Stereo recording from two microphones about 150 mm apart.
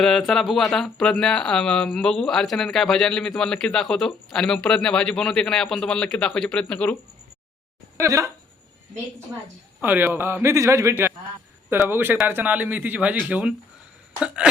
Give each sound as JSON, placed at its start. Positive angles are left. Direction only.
{"t": 0.0, "sound": "speech", "side_deg": 5}
{"t": 7.9, "sound": "speech", "side_deg": -20}
{"t": 9.8, "sound": "a man's voice", "side_deg": -15}